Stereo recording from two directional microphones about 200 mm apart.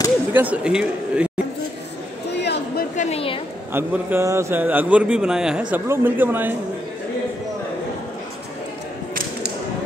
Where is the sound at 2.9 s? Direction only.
35° left (ahead or behind).